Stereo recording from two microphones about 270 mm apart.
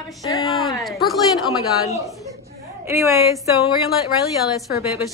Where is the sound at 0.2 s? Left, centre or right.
Centre.